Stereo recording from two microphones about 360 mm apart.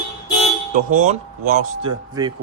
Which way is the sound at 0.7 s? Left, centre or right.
Right.